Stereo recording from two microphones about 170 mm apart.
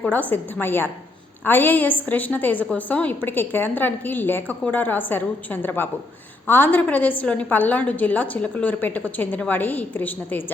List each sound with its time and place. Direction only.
0.0 s a woman's voice: 10° left (ahead or behind)